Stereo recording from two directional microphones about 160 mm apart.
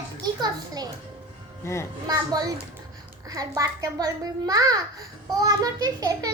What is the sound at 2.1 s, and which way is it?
A child's voice, 25° right (ahead or behind).